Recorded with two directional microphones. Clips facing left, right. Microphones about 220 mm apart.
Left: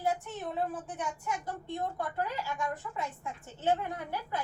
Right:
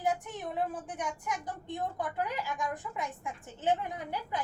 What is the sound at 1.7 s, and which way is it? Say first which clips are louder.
A woman's voice: even; 15° right (ahead or behind).